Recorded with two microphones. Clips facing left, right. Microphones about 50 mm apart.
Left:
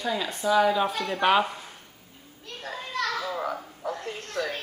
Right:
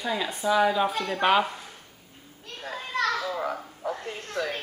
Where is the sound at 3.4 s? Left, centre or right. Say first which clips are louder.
Even; centre.